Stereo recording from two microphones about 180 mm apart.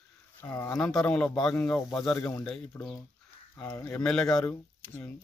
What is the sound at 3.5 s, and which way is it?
Speech, 15° left (ahead or behind).